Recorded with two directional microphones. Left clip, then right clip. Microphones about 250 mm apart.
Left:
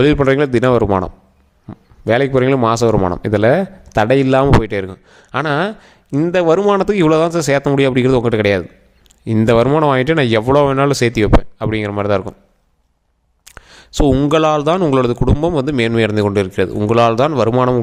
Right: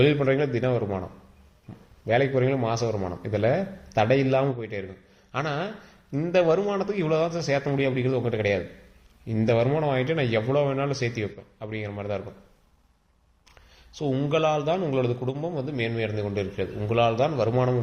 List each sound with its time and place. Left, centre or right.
0.0 s a man's voice: left
13.4 s speech: left